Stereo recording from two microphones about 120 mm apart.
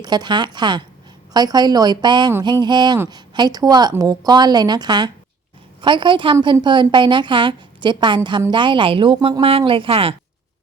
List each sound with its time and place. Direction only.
0.0 s a woman's voice: 35° right (ahead or behind)